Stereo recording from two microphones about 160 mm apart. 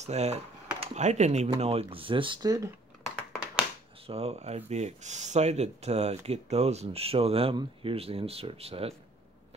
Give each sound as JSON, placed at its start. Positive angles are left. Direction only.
{"t": 0.0, "sound": "speech", "side_deg": -45}
{"t": 4.1, "sound": "speech", "side_deg": -40}